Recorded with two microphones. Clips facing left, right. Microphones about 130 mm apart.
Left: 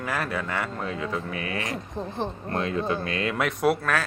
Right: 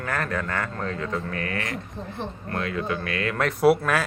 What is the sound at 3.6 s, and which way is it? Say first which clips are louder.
Speech: right 5 dB; 5° right (ahead or behind).